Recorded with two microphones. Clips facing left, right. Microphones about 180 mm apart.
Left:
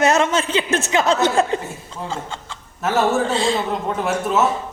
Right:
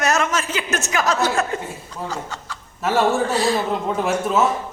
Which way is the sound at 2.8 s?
Centre (ahead or behind).